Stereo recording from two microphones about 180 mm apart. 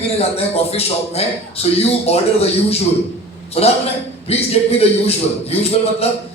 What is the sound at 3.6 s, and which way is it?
A man's voice, 35° left (ahead or behind).